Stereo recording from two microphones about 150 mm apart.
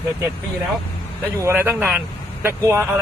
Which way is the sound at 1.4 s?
15° right (ahead or behind).